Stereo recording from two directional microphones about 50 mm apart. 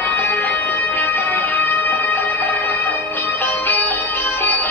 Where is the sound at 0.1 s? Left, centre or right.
Left.